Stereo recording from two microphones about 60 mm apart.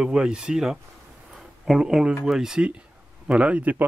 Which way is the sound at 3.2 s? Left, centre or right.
Right.